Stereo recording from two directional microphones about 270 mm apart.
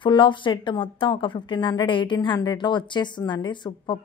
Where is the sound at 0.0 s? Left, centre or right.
Centre.